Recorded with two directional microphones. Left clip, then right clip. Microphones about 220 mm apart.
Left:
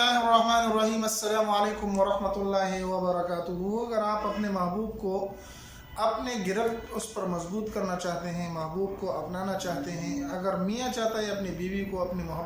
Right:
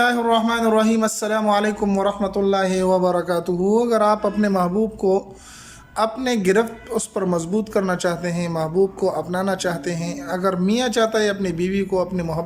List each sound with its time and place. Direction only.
0.0 s a man's voice: 40° right (ahead or behind)